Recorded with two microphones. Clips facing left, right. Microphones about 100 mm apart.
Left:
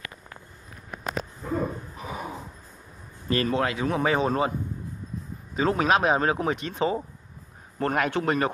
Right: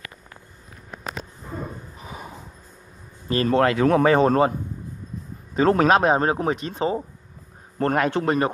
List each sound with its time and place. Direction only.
3.3 s speech: 30° right (ahead or behind)
3.5 s speech: 60° right (ahead or behind)
5.5 s a man's voice: 45° right (ahead or behind); by 8.5 s 30° right (ahead or behind)